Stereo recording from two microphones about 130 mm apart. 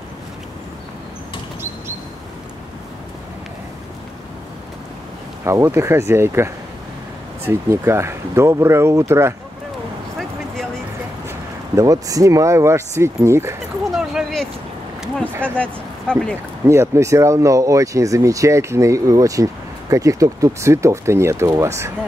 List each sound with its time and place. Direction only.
5.4 s speech: 20° right (ahead or behind)
10.1 s a sound: 5° left (ahead or behind)
11.2 s speech: 25° right (ahead or behind)
13.8 s a sound: centre (ahead or behind)
15.5 s speech: 10° left (ahead or behind)
16.6 s speech: 20° right (ahead or behind)